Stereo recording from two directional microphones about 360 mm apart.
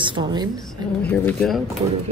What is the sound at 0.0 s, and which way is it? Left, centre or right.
Speech, centre.